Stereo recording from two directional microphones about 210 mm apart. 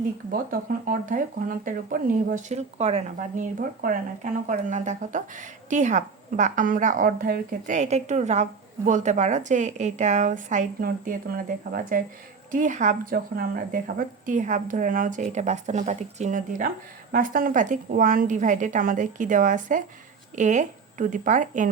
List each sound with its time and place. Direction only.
0.3 s speech: 40° right (ahead or behind)